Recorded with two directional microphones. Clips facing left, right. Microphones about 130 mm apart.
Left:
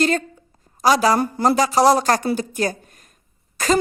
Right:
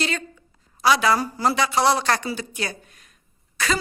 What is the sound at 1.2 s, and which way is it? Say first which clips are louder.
Speech: left 5 dB; 55° left (ahead or behind).